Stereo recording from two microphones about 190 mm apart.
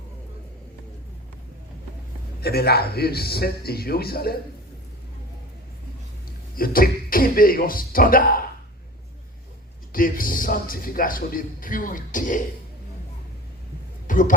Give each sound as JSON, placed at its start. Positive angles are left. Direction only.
{"t": 2.4, "sound": "a man's voice", "side_deg": 55}
{"t": 6.6, "sound": "speech", "side_deg": 50}
{"t": 9.9, "sound": "a man's voice", "side_deg": 45}
{"t": 14.1, "sound": "speech", "side_deg": 45}